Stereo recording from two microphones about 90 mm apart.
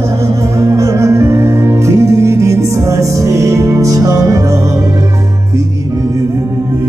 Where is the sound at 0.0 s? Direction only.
35° right (ahead or behind).